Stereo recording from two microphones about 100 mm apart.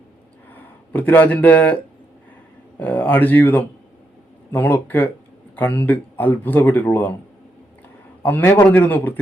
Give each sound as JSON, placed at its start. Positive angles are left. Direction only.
{"t": 0.5, "sound": "speech", "side_deg": 15}
{"t": 8.2, "sound": "speech", "side_deg": 20}